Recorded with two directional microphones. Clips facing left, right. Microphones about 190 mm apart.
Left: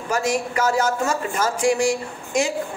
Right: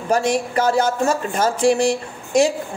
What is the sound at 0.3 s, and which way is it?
A woman's voice, 30° right (ahead or behind).